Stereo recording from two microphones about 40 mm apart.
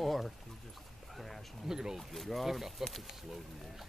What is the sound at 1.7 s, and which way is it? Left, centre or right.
Speech, centre.